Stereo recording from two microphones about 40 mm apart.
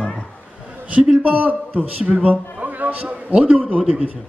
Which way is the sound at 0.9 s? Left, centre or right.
Right.